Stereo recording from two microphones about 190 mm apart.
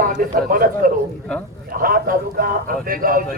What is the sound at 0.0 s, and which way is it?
A man's voice, 50° right (ahead or behind).